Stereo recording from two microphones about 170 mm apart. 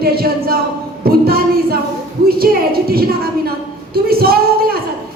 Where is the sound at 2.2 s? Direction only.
60° right (ahead or behind).